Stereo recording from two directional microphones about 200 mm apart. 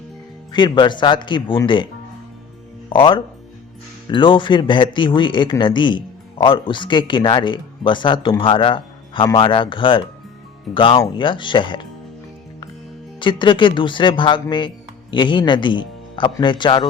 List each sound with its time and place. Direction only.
0.5 s speech: 20° left (ahead or behind)
2.9 s speech: 25° left (ahead or behind)
13.1 s speech: 25° left (ahead or behind)